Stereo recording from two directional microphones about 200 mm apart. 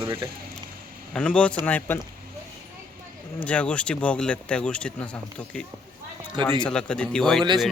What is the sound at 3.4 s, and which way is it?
Speech, 5° left (ahead or behind).